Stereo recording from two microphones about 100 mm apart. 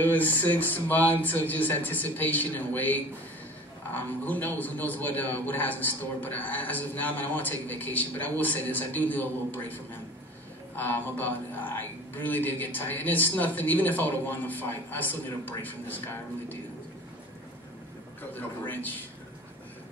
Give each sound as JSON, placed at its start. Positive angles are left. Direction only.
{"t": 0.0, "sound": "a man's voice", "side_deg": 15}
{"t": 10.8, "sound": "a man's voice", "side_deg": 20}
{"t": 18.7, "sound": "a man's voice", "side_deg": 15}